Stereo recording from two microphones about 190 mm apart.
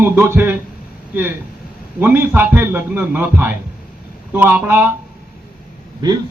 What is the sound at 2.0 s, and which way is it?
A man's voice, 10° right (ahead or behind).